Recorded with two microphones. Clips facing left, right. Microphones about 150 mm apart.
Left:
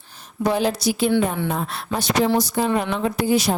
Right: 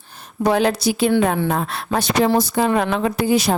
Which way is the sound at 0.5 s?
75° right (ahead or behind).